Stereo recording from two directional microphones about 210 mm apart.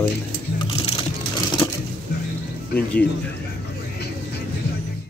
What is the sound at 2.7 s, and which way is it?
Speech, 5° left (ahead or behind).